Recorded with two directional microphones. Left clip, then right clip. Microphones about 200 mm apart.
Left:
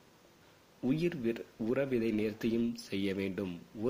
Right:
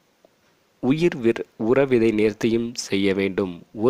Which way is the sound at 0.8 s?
40° right (ahead or behind).